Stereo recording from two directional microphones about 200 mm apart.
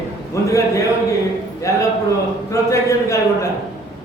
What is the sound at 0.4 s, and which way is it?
A man's voice, 15° left (ahead or behind).